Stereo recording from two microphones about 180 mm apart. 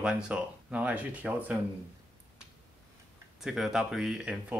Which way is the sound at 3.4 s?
Centre (ahead or behind).